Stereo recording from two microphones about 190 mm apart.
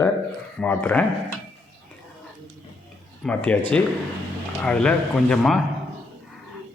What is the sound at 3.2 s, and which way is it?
Speech, 5° left (ahead or behind).